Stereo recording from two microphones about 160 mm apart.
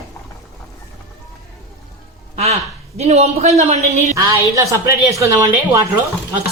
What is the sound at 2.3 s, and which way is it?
A woman's voice, 40° right (ahead or behind).